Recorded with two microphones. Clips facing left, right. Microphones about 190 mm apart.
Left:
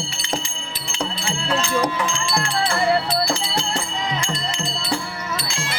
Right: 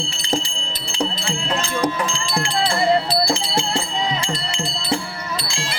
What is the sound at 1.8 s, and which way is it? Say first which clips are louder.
Wind chime: right 1 dB; 35° right (ahead or behind).